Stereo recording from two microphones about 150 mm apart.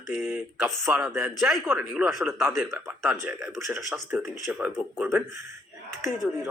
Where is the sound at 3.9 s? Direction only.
Centre (ahead or behind).